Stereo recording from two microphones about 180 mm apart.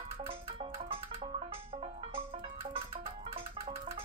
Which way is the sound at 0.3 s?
30° right (ahead or behind).